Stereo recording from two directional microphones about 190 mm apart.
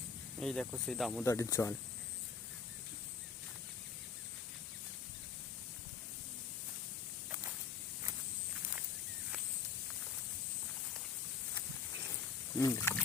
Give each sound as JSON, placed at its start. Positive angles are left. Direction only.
{"t": 0.3, "sound": "speech", "side_deg": 0}
{"t": 1.2, "sound": "speech", "side_deg": 15}
{"t": 12.5, "sound": "speech", "side_deg": 15}